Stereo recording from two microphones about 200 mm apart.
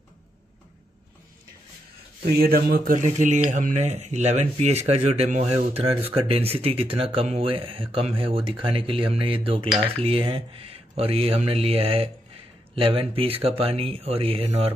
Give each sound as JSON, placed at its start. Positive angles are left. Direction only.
{"t": 2.2, "sound": "speech", "side_deg": -50}